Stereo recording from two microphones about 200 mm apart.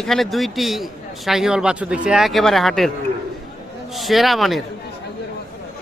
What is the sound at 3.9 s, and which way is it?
Speech, centre (ahead or behind).